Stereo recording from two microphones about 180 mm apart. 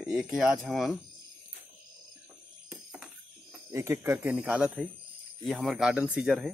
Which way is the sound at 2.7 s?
5° right (ahead or behind).